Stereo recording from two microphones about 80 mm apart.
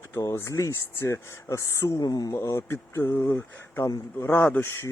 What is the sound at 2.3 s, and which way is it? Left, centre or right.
Speech, left.